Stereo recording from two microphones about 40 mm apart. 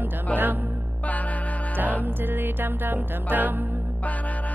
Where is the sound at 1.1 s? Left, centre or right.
Left.